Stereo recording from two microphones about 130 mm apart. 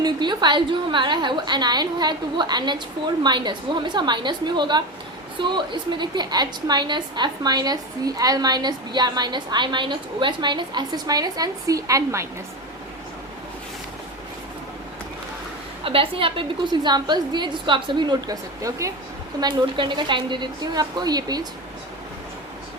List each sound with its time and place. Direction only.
0.0 s a woman's voice: 35° right (ahead or behind)
15.8 s a woman's voice: 45° right (ahead or behind)